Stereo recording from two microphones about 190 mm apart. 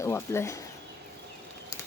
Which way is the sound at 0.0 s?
15° left (ahead or behind).